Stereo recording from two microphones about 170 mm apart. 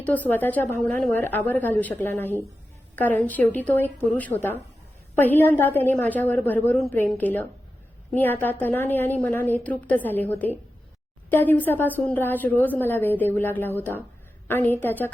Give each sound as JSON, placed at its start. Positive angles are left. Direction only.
{"t": 0.0, "sound": "a woman's voice", "side_deg": 10}